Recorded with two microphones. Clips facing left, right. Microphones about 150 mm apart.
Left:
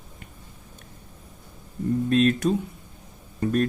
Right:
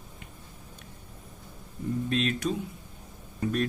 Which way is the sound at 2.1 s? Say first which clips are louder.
Left 9 dB; 45° left (ahead or behind).